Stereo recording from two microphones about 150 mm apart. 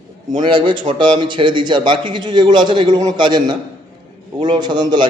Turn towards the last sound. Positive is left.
turn(degrees=-30)  # may be behind; listen again after turning